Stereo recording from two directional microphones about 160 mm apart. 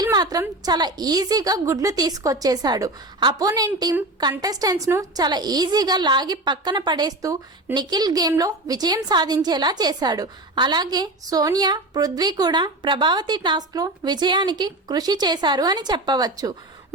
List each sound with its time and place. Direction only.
0.0 s a woman's voice: 25° right (ahead or behind)